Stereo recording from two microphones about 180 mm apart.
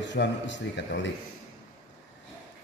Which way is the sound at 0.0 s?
80° left.